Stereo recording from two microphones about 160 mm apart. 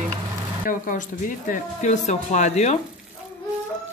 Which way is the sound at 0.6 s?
55° left (ahead or behind).